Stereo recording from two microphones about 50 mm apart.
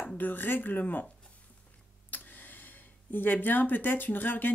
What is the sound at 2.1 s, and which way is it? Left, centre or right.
A woman's voice, left.